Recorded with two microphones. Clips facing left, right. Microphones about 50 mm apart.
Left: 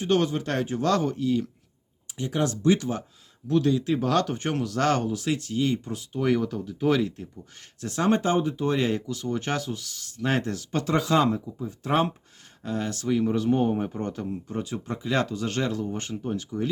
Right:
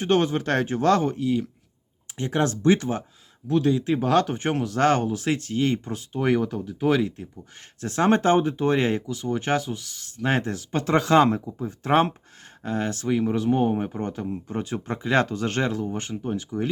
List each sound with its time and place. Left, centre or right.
0.1 s speech: right
2.1 s speech: right
3.5 s speech: right
6.1 s speech: right
7.8 s speech: right
9.0 s speech: right
10.8 s speech: right
13.1 s speech: centre
14.4 s speech: right
15.7 s speech: centre